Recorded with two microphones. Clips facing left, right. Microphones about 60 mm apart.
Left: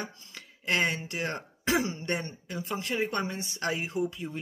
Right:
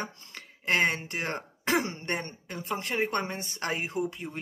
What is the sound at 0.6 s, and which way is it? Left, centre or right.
Speech, right.